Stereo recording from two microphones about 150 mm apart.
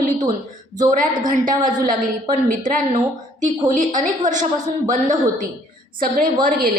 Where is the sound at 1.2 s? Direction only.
60° right (ahead or behind).